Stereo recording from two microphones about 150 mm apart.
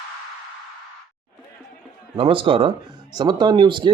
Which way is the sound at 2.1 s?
35° right (ahead or behind).